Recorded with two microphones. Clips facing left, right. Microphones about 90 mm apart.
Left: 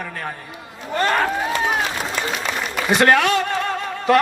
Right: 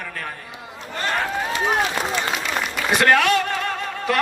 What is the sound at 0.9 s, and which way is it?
Speech, 55° left (ahead or behind).